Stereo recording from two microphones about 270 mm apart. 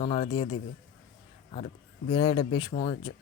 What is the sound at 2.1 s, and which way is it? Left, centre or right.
Speech, centre.